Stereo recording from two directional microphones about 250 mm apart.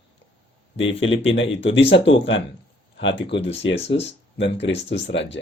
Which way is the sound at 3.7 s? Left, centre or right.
Left.